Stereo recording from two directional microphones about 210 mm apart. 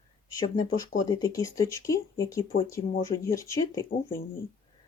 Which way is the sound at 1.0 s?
20° left (ahead or behind).